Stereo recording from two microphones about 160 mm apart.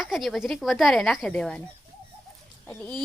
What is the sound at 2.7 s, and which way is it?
Speech, 5° left (ahead or behind).